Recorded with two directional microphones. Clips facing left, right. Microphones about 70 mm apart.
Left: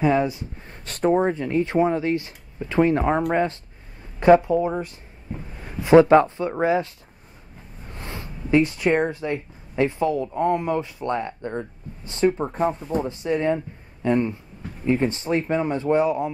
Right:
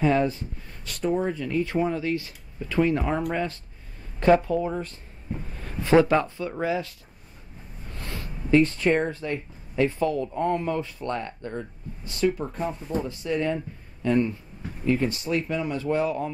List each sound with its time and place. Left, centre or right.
0.0 s speech: centre
0.7 s speech: left
1.3 s speech: left
4.2 s a man's voice: centre
7.9 s speech: left